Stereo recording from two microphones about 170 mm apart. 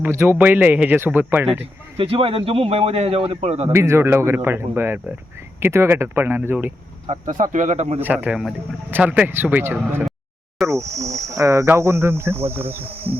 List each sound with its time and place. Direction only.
0.0 s speech: 15° right (ahead or behind)
2.0 s a man's voice: 35° right (ahead or behind)
3.7 s speech: 15° right (ahead or behind)
7.1 s speech: 50° right (ahead or behind)
8.0 s speech: 10° right (ahead or behind)